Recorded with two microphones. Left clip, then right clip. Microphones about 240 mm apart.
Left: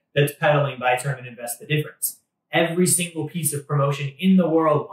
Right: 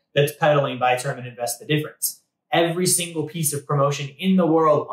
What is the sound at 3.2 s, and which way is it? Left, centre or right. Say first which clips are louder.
Speech: right 2 dB; centre.